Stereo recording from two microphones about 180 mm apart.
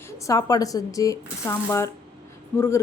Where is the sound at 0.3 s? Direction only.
20° left (ahead or behind).